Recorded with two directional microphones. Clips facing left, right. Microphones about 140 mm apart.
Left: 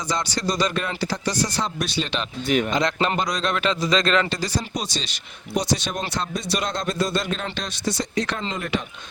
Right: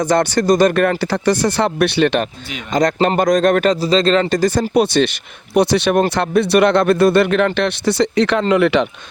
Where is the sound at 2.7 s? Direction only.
45° right (ahead or behind).